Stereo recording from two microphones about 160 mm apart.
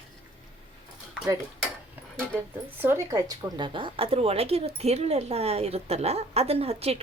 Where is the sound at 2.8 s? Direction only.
15° right (ahead or behind).